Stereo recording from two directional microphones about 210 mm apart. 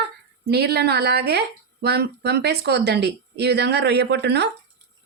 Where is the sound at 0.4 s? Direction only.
50° right (ahead or behind).